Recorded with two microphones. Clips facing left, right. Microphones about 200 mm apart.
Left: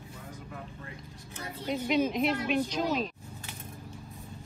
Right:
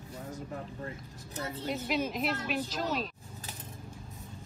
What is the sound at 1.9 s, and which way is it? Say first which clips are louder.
Speech: left 6 dB; centre (ahead or behind).